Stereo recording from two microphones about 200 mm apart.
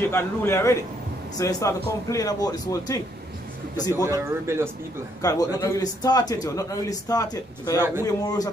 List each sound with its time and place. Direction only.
0.0 s a man's voice: 10° left (ahead or behind)
3.9 s speech: 15° right (ahead or behind)
5.2 s a man's voice: 15° left (ahead or behind)